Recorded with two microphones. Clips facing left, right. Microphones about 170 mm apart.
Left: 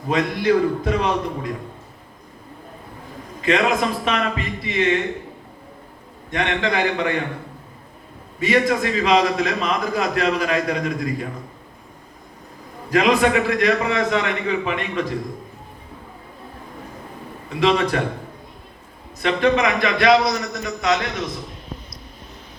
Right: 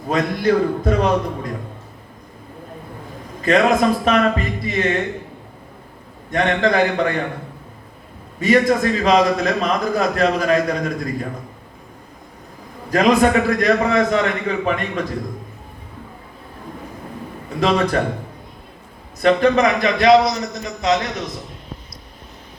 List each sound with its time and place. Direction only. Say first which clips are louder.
0.1 s a man's voice: right 1 dB; 45° right (ahead or behind)
3.4 s a man's voice: right 4 dB; 45° right (ahead or behind)
6.3 s a man's voice: right 5 dB; 45° right (ahead or behind)
8.4 s a man's voice: right 3 dB; 45° right (ahead or behind)
12.9 s a man's voice: right 2 dB; 45° right (ahead or behind)
17.6 s a man's voice: right 1 dB; 40° right (ahead or behind)
19.2 s speech: right 4 dB; 40° right (ahead or behind)
20.1 s a man's voice: right 4 dB; 25° right (ahead or behind)